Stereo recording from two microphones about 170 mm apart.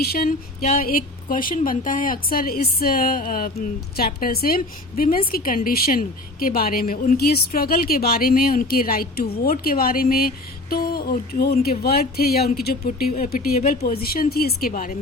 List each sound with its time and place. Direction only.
0.0 s a woman's voice: 60° left (ahead or behind)